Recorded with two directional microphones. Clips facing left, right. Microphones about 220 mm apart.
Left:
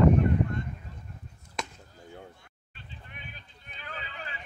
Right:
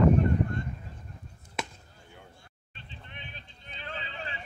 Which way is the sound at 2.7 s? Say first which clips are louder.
Even; 25° right (ahead or behind).